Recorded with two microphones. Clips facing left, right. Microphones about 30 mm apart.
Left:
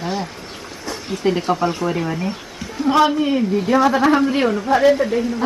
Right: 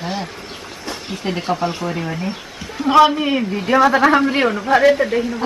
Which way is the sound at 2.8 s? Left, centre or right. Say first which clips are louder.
Right 3 dB; right.